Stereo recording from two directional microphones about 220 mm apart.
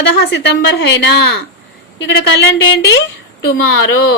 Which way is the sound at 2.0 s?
55° left (ahead or behind).